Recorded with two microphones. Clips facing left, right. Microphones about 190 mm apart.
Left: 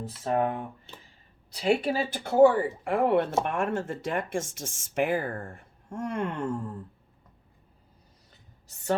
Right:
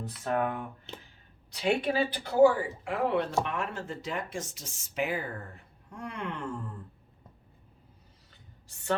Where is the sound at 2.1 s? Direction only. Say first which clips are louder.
Left 3 dB; 50° left (ahead or behind).